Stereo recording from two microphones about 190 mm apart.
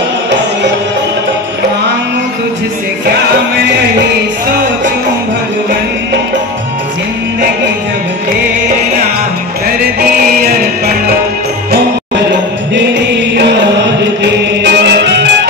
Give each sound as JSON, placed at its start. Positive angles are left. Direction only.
{"t": 13.3, "sound": "music", "side_deg": -65}